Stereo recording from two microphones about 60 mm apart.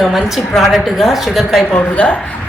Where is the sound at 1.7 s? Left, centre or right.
Left.